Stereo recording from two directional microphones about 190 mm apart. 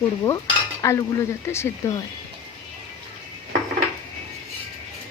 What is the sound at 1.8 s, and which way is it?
Speech, 15° left (ahead or behind).